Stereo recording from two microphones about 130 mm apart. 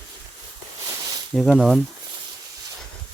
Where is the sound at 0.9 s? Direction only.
25° right (ahead or behind).